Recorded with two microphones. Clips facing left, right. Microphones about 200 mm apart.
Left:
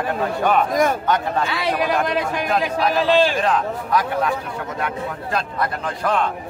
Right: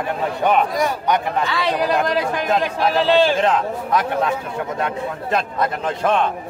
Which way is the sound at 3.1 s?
20° right (ahead or behind).